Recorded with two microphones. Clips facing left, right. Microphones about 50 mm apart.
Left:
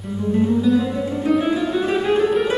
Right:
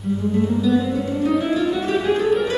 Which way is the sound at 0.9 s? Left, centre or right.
Centre.